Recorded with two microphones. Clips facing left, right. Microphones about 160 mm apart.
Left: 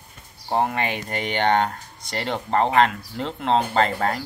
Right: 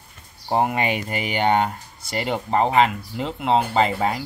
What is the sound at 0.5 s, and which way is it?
Speech, 15° right (ahead or behind).